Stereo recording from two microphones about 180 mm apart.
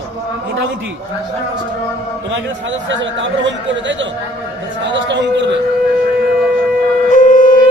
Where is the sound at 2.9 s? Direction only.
90° right.